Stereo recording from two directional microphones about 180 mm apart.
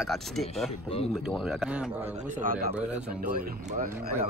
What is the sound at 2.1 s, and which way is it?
Speech, 45° right (ahead or behind).